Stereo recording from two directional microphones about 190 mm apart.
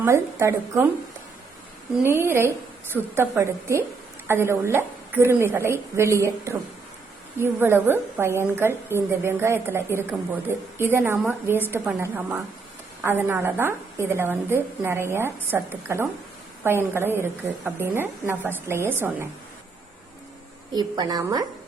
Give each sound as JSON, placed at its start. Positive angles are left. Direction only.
{"t": 0.0, "sound": "a woman's voice", "side_deg": -15}
{"t": 2.0, "sound": "a woman's voice", "side_deg": -10}
{"t": 20.7, "sound": "a woman's voice", "side_deg": -20}